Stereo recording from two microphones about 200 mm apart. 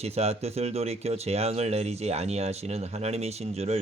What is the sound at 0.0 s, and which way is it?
Speech, 30° right (ahead or behind).